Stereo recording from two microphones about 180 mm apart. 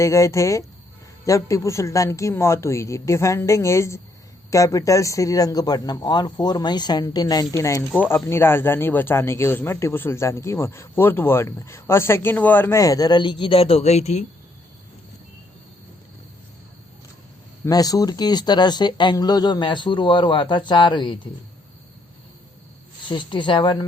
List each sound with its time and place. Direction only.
0.0 s speech: 15° left (ahead or behind); by 14.3 s 40° left (ahead or behind)
17.7 s speech: 20° left (ahead or behind)
23.0 s speech: 25° left (ahead or behind)